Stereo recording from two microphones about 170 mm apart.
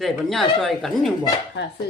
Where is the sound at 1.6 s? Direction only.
80° left.